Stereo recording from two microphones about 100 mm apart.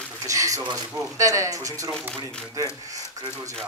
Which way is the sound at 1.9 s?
10° left (ahead or behind).